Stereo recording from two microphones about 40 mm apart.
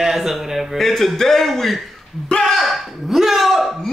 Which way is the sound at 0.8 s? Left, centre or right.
Centre.